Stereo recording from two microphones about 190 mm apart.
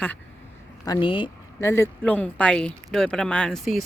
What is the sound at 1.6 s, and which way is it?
Speech, 15° left (ahead or behind).